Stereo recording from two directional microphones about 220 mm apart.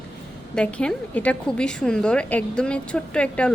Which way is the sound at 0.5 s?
5° left (ahead or behind).